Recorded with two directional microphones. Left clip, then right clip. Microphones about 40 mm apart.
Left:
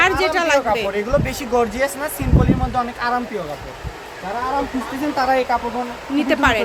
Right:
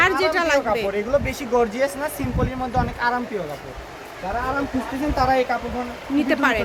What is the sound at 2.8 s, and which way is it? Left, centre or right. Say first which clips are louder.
Speech: right 1 dB; right.